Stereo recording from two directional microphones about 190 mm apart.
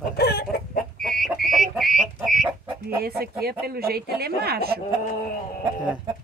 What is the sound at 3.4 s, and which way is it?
A man's voice, 55° right (ahead or behind).